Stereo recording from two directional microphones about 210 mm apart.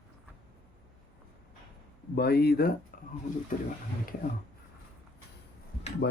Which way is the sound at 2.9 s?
40° left (ahead or behind).